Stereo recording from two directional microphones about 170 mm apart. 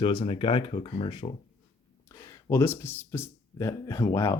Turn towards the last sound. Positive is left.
turn(degrees=20)  # may be behind; listen again after turning